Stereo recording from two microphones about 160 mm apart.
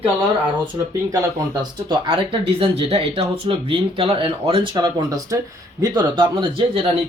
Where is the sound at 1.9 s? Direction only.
35° right (ahead or behind).